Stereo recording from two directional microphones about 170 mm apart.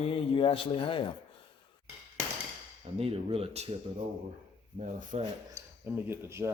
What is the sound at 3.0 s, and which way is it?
Speech, 35° right (ahead or behind).